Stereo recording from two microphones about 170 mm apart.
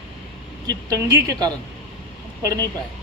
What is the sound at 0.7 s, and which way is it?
A woman's voice, 20° right (ahead or behind).